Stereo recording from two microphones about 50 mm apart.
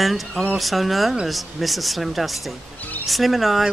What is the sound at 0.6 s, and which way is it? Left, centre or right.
Speech, centre.